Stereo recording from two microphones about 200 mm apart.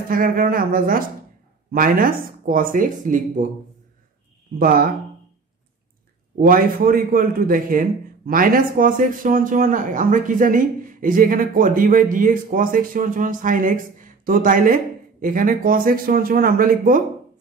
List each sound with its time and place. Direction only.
0.1 s speech: 45° right (ahead or behind)
4.6 s speech: 45° right (ahead or behind)
6.4 s speech: 45° right (ahead or behind)